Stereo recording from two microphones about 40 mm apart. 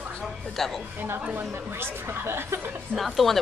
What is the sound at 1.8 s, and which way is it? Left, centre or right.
Speech, right.